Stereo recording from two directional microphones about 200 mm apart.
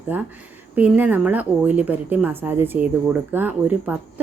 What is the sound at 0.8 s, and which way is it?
A woman's voice, 5° right (ahead or behind).